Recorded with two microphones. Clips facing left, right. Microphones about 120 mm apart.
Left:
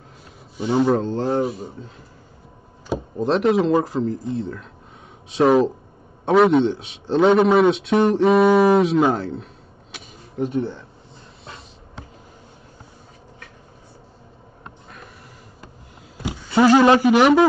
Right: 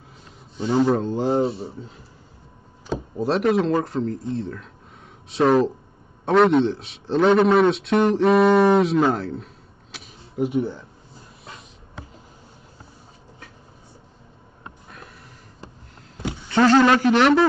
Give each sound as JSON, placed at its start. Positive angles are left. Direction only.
{"t": 0.6, "sound": "a man's voice", "side_deg": 10}
{"t": 1.1, "sound": "speech", "side_deg": -10}
{"t": 1.4, "sound": "a man's voice", "side_deg": -30}
{"t": 3.2, "sound": "a man's voice", "side_deg": 0}
{"t": 9.9, "sound": "a sound", "side_deg": -10}
{"t": 16.2, "sound": "a sound", "side_deg": 10}
{"t": 17.0, "sound": "speech", "side_deg": 10}